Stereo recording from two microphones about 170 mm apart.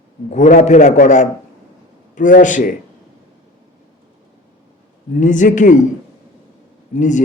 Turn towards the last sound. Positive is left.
turn(degrees=45)  # may be behind; listen again after turning